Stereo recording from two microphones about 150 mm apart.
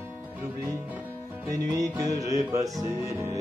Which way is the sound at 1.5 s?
20° right (ahead or behind).